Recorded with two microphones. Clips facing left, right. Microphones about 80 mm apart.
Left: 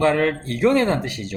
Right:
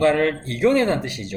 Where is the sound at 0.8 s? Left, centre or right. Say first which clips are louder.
Even; left.